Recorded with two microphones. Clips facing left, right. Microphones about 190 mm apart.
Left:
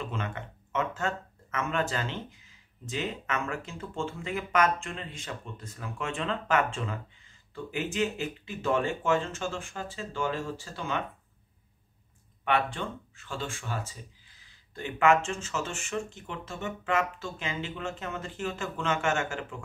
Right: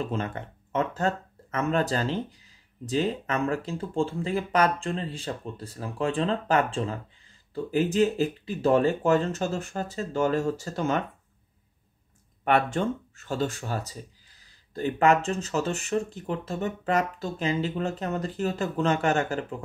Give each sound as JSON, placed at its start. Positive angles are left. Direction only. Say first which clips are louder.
{"t": 0.0, "sound": "speech", "louder": "right 5 dB", "side_deg": -35}
{"t": 12.4, "sound": "speech", "louder": "right 5 dB", "side_deg": -45}